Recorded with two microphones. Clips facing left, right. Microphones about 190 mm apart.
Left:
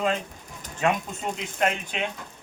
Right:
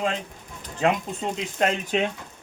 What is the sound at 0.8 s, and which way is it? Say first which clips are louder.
Speech: right 2 dB; 30° right (ahead or behind).